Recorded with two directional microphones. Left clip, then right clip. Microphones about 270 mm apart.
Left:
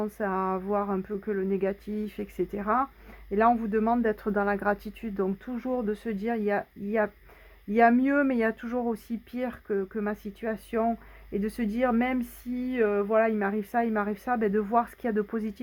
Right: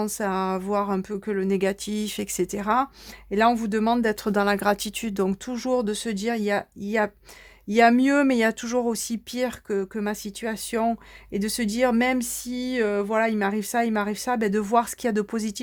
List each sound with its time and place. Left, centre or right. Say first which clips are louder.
0.0 s speech: right 3 dB; right